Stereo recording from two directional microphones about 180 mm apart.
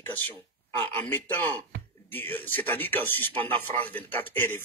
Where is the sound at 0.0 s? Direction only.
10° left (ahead or behind).